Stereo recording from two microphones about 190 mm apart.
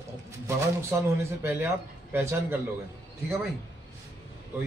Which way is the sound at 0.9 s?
10° right (ahead or behind).